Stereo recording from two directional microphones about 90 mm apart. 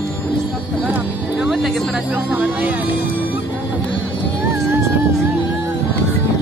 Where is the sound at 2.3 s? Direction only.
20° right (ahead or behind).